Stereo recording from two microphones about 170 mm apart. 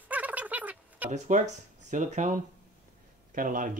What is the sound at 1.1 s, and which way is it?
Speech, 45° right (ahead or behind).